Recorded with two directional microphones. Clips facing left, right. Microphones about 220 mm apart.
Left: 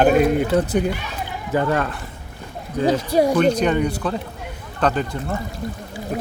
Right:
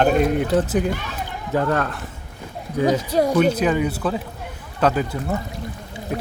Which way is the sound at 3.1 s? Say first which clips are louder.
Left 2 dB; 10° left (ahead or behind).